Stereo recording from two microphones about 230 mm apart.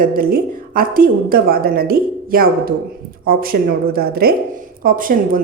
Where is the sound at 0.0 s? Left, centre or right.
Right.